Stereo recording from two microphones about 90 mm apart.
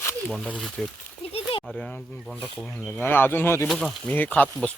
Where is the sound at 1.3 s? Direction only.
80° left.